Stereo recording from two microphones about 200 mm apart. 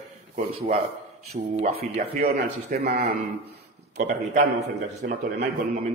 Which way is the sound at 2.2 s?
50° right (ahead or behind).